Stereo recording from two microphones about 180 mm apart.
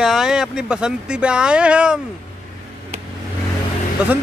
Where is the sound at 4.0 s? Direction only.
5° right (ahead or behind).